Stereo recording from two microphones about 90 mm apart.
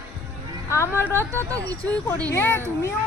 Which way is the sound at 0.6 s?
30° left (ahead or behind).